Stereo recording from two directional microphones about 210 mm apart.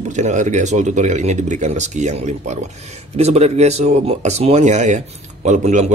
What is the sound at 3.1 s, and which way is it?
Speech, 30° right (ahead or behind).